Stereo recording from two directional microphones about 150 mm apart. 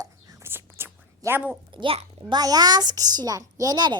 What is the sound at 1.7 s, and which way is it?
A child's voice, 35° right (ahead or behind).